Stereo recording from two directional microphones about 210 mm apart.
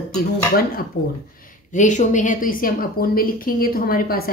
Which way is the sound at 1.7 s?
35° left (ahead or behind).